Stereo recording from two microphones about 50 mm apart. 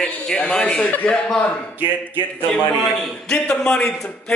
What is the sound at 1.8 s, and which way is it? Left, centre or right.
Speech, right.